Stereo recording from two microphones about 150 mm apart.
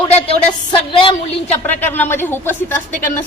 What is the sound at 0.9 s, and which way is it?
Speech, 35° left (ahead or behind).